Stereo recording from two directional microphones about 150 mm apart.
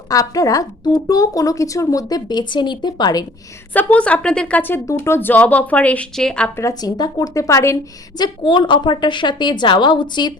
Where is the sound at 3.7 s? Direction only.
10° left (ahead or behind).